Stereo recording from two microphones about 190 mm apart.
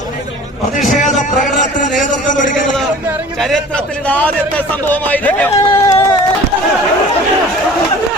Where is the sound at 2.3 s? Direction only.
40° left (ahead or behind).